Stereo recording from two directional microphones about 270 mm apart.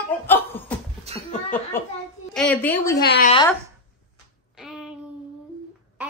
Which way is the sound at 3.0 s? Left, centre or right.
Left.